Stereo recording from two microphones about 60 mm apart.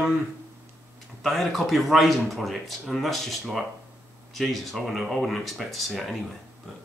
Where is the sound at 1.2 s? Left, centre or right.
Centre.